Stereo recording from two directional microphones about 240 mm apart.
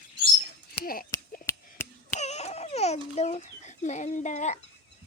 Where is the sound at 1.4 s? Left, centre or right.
Centre.